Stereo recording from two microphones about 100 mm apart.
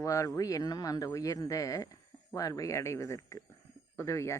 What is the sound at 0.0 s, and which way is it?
A man's voice, 30° left (ahead or behind).